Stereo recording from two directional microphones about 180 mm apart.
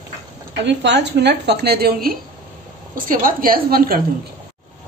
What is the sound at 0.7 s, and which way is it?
A woman's voice, 70° right (ahead or behind).